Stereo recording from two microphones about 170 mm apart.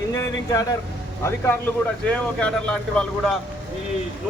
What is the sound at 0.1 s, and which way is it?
Speech, 20° left (ahead or behind).